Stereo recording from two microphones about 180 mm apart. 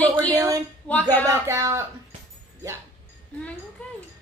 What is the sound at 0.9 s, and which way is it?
Speech, 10° left (ahead or behind).